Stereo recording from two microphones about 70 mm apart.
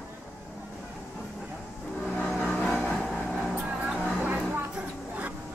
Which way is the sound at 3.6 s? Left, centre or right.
Centre.